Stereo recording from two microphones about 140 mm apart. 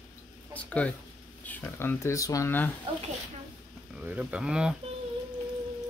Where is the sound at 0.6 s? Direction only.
10° left (ahead or behind).